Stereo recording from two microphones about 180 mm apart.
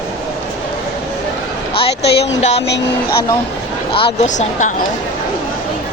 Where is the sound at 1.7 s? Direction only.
30° left (ahead or behind).